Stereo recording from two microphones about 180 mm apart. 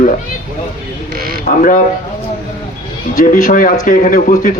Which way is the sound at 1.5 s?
45° left (ahead or behind).